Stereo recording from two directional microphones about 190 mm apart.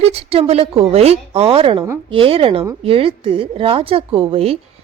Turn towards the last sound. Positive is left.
turn(degrees=-30)  # may be behind; listen again after turning